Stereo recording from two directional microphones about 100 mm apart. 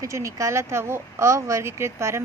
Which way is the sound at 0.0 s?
30° right (ahead or behind).